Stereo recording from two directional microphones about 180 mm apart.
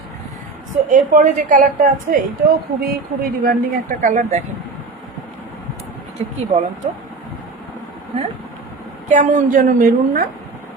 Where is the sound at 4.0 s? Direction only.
45° right (ahead or behind).